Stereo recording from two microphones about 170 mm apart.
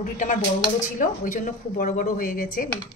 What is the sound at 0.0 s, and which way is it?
Speech, 50° left (ahead or behind).